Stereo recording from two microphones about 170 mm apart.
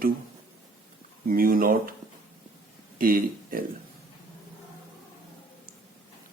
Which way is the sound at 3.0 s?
55° right (ahead or behind).